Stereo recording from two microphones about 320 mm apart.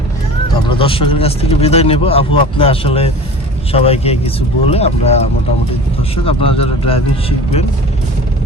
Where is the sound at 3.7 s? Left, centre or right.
Centre.